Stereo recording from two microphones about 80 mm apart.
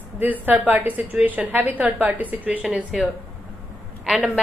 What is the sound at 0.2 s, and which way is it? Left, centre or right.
A woman's voice, right.